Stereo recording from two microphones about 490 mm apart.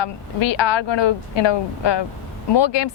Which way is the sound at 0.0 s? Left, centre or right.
Left.